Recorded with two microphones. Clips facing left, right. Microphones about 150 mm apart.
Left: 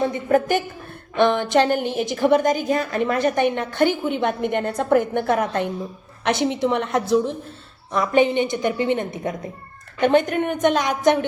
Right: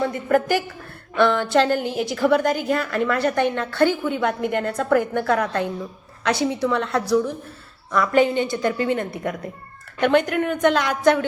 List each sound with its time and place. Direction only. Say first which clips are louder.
0.0 s a woman's voice: left 1 dB; 20° left (ahead or behind)